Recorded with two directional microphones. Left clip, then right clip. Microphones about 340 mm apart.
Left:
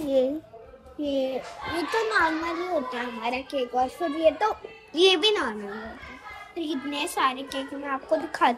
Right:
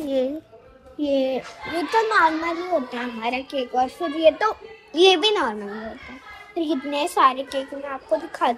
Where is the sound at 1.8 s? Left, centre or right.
Centre.